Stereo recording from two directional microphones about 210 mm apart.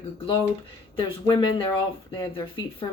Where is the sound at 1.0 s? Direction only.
25° left (ahead or behind).